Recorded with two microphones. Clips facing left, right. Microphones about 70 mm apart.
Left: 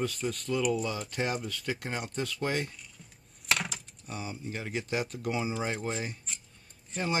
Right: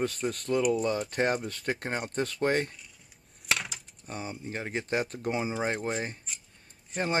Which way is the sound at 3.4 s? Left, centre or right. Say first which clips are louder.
Left 1 dB; centre.